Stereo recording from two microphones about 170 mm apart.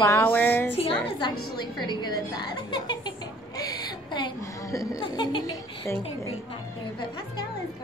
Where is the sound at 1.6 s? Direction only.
25° left (ahead or behind).